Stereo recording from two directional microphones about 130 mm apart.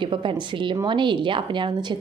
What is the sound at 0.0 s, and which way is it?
A woman's voice, 40° right (ahead or behind).